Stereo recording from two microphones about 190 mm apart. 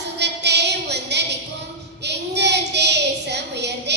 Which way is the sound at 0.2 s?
65° right (ahead or behind).